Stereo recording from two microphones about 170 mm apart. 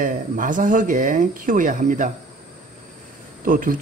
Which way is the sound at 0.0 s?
50° right (ahead or behind).